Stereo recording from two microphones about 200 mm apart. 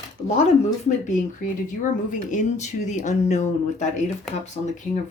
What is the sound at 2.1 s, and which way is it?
Speech, 40° left (ahead or behind).